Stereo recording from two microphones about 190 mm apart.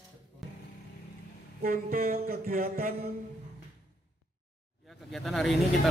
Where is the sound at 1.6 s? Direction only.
50° right (ahead or behind).